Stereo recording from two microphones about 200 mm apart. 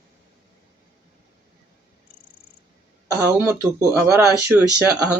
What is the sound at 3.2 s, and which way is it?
Speech, 15° right (ahead or behind).